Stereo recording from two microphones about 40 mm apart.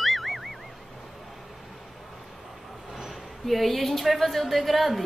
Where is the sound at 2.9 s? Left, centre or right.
Centre.